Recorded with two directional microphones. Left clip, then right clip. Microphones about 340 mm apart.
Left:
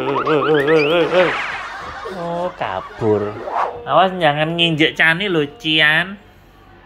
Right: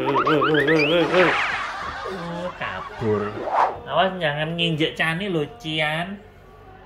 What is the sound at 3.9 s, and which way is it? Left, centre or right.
Speech, centre.